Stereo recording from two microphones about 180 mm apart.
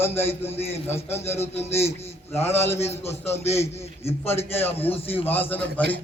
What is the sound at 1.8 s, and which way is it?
A man's voice, 35° left (ahead or behind).